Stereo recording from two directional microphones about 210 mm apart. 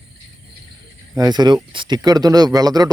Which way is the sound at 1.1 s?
20° right (ahead or behind).